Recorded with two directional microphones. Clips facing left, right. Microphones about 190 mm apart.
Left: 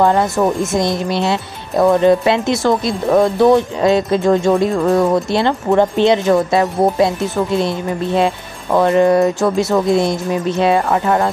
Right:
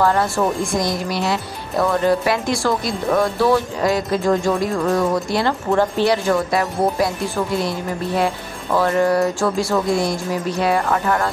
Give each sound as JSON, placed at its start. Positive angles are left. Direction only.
{"t": 0.0, "sound": "speech", "side_deg": 20}